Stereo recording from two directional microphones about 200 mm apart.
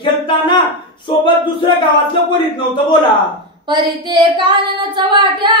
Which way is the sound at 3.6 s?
25° right (ahead or behind).